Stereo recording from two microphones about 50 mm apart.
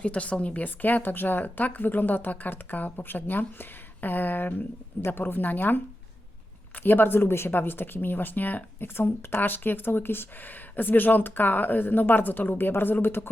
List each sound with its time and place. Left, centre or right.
0.0 s a woman's voice: left
9.0 s speech: left
9.4 s a woman's voice: left